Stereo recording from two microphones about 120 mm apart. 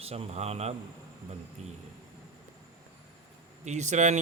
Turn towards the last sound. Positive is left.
turn(degrees=-80)